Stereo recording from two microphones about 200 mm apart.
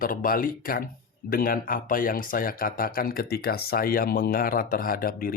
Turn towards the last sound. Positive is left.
turn(degrees=45)  # may be behind; listen again after turning